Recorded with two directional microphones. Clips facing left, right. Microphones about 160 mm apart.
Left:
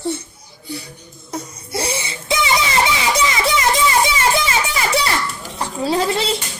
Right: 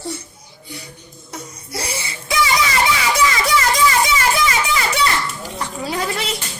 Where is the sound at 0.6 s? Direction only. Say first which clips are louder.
Left 6 dB; 30° left (ahead or behind).